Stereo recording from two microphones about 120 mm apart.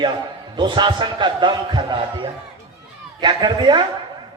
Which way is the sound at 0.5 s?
40° right (ahead or behind).